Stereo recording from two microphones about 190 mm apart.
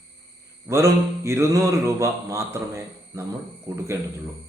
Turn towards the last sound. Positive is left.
turn(degrees=-15)  # may be behind; listen again after turning